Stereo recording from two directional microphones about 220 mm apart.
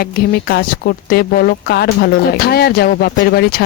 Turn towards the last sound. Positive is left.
turn(degrees=45)  # may be behind; listen again after turning